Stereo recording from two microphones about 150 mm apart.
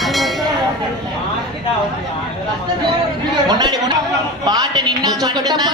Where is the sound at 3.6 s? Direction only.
25° right (ahead or behind).